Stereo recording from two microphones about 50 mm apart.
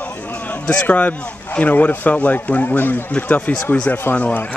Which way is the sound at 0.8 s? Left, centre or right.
Left.